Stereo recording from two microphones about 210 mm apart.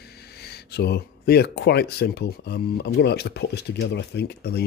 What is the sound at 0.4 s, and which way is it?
Speech, 50° left (ahead or behind).